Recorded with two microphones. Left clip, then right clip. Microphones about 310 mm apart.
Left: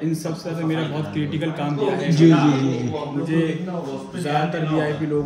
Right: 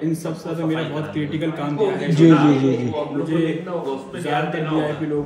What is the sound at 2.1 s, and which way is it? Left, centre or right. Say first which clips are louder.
Speech: right 3 dB; centre.